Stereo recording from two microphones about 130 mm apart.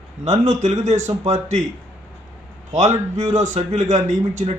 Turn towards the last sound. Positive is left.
turn(degrees=-65)  # may be behind; listen again after turning